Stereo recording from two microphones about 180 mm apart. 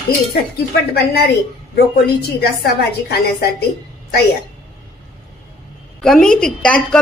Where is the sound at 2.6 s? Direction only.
65° left (ahead or behind).